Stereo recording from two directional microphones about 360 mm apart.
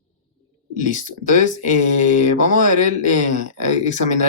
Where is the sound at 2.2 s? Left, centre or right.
Left.